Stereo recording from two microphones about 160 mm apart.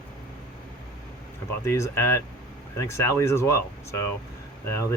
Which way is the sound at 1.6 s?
15° left (ahead or behind).